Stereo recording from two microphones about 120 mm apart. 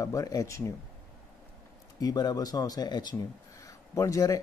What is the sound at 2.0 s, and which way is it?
Speech, 35° left (ahead or behind).